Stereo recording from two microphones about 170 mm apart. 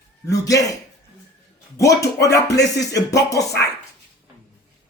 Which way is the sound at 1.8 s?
20° left (ahead or behind).